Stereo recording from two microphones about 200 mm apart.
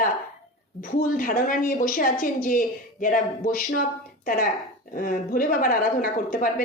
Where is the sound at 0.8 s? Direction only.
45° left (ahead or behind).